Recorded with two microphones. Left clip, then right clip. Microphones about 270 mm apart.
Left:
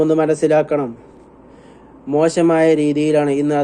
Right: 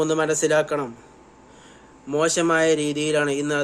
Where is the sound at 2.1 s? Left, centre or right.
Centre.